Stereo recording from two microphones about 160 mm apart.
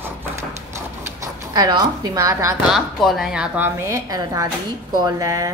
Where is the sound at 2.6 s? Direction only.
Centre (ahead or behind).